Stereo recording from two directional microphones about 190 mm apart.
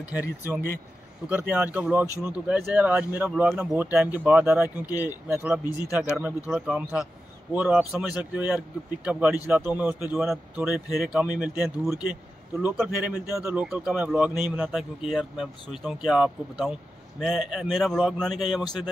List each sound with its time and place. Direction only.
0.1 s a man's voice: 10° right (ahead or behind)